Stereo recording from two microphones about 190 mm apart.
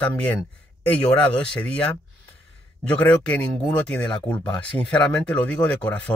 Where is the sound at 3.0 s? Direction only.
5° left (ahead or behind).